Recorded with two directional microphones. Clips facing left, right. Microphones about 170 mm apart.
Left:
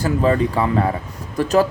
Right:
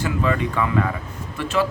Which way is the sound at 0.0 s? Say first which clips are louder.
Left 5 dB; 35° left (ahead or behind).